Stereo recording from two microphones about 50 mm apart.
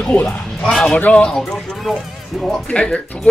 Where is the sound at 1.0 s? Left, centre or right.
Left.